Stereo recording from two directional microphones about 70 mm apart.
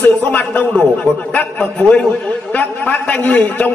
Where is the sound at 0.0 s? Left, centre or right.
Left.